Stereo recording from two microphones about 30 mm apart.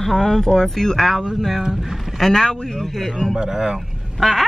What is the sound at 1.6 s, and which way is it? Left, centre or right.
Speech, centre.